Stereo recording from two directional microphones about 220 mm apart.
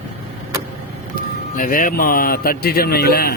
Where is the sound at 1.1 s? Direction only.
40° left (ahead or behind).